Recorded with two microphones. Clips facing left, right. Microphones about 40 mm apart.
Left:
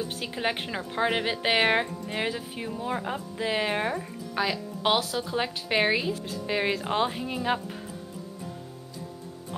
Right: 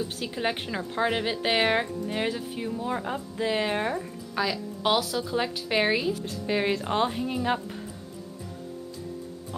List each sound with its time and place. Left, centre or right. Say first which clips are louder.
0.0 s speech: even; centre